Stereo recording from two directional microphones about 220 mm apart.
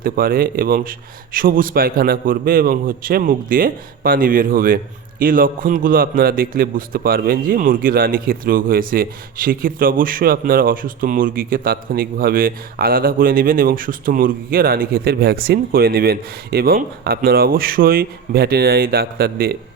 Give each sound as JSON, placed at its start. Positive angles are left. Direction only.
{"t": 0.0, "sound": "a man's voice", "side_deg": -40}